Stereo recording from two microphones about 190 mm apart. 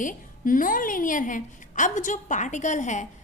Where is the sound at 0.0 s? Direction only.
45° left (ahead or behind).